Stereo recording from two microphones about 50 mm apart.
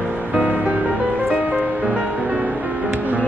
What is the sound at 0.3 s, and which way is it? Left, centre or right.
Music, right.